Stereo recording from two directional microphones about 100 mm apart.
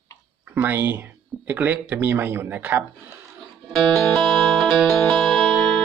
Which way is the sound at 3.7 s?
5° left (ahead or behind).